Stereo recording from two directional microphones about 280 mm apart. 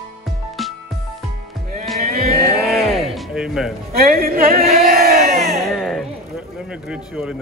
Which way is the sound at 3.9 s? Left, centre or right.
Right.